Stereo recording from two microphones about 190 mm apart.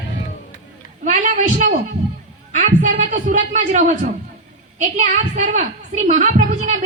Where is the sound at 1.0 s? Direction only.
40° right (ahead or behind).